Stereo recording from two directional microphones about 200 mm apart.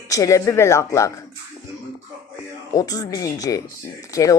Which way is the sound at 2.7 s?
20° left (ahead or behind).